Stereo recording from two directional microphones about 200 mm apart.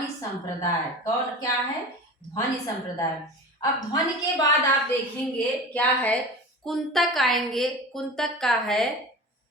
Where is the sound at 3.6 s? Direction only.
20° left (ahead or behind).